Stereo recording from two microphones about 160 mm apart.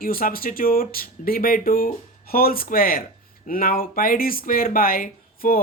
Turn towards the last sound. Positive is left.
turn(degrees=60)  # may be behind; listen again after turning